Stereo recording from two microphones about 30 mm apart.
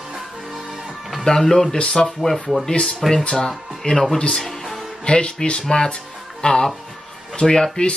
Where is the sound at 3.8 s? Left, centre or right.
Left.